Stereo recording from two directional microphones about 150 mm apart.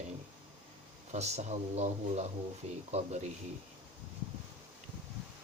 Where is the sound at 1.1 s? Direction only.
45° right (ahead or behind).